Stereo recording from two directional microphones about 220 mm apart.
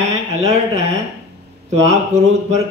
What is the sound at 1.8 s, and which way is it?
Speech, 30° right (ahead or behind).